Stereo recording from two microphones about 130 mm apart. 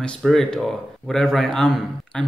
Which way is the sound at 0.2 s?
5° left (ahead or behind).